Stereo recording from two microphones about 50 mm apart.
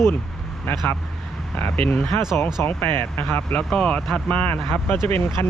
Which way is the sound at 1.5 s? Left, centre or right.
Left.